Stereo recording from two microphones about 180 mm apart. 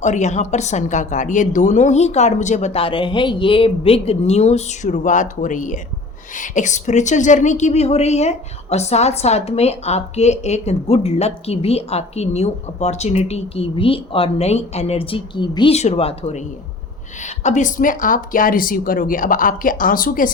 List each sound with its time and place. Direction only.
0.0 s a woman's voice: 40° left (ahead or behind)